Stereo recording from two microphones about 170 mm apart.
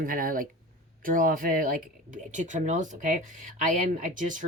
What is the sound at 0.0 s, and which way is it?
Speech, 55° right (ahead or behind).